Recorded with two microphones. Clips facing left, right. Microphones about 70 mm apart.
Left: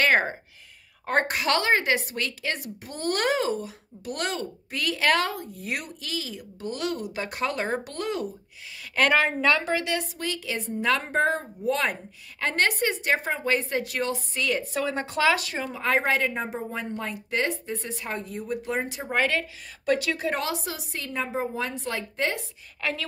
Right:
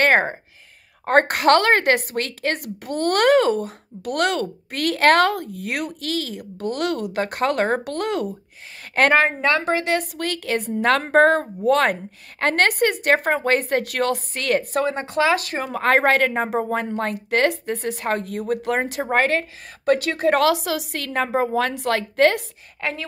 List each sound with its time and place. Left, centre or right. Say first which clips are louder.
0.0 s speech: right 4 dB; right
1.0 s a woman's voice: right 8 dB; right
8.9 s a woman's voice: right 5 dB; right
15.0 s speech: right 1 dB; right
15.3 s a woman's voice: right 6 dB; right
22.8 s a woman's voice: right 3 dB; right